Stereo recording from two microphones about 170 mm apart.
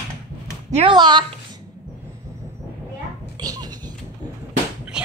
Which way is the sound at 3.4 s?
20° right (ahead or behind).